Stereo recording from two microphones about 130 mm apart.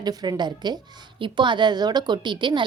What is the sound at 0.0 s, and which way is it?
A woman's voice, 30° right (ahead or behind).